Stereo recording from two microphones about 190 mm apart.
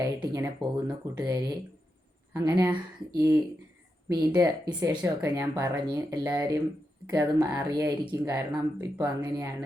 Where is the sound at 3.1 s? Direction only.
20° right (ahead or behind).